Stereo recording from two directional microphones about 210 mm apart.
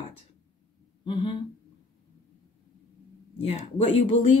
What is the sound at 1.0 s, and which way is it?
Speech, 25° left (ahead or behind).